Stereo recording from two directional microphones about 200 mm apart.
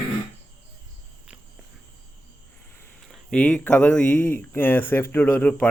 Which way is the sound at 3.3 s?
5° left (ahead or behind).